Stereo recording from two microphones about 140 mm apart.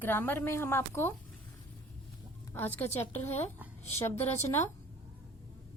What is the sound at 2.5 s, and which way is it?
Speech, 15° left (ahead or behind).